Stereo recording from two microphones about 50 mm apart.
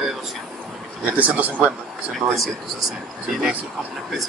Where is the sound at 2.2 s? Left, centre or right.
Centre.